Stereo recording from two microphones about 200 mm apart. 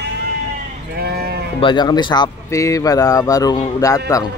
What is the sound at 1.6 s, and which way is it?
A man's voice, 20° left (ahead or behind).